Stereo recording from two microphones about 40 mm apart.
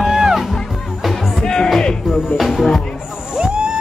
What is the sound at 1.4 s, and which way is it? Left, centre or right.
Music, centre.